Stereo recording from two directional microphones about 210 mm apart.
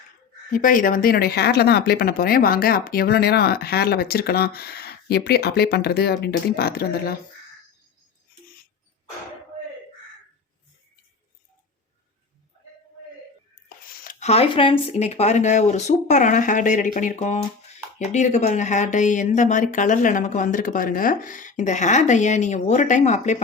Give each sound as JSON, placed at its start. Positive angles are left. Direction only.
{"t": 0.5, "sound": "speech", "side_deg": 40}
{"t": 13.8, "sound": "speech", "side_deg": 40}